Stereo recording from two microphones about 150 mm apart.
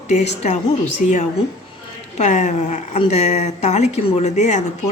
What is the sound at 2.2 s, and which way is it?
Speech, 50° left (ahead or behind).